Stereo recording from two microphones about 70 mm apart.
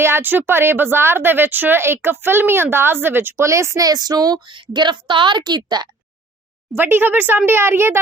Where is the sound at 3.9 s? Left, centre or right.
Right.